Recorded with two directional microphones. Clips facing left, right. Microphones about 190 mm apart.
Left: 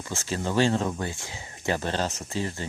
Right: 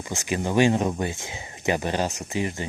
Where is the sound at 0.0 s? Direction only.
15° right (ahead or behind).